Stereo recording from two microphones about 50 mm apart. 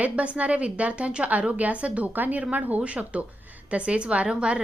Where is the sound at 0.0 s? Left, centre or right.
Right.